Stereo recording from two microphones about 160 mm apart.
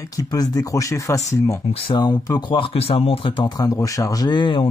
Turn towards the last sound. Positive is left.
turn(degrees=30)  # may be behind; listen again after turning